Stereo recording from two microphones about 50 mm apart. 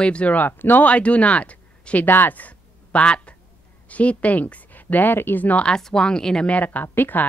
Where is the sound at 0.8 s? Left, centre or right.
Left.